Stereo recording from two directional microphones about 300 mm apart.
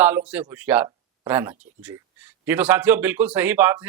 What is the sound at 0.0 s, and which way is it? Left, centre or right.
Speech, centre.